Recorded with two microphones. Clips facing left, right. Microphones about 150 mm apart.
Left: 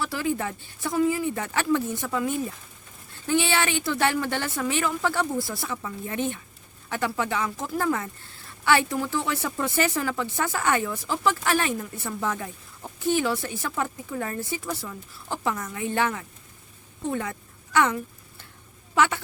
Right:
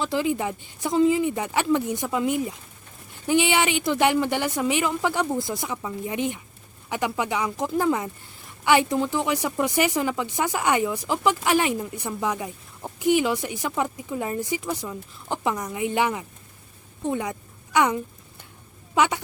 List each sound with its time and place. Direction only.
0.0 s speech: 20° right (ahead or behind)
17.1 s a sound: 15° right (ahead or behind)
18.9 s speech: 15° right (ahead or behind)